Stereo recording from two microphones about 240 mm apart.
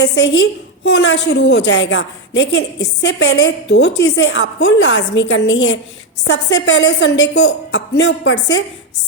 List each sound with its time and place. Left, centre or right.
0.0 s a woman's voice: left